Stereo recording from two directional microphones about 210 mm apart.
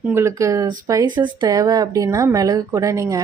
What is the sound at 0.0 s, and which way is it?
Speech, 10° right (ahead or behind).